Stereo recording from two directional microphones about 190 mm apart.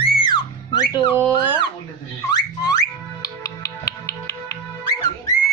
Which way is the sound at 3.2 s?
20° left (ahead or behind).